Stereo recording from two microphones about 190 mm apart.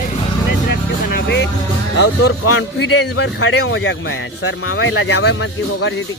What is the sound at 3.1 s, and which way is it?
Speech, 70° left (ahead or behind).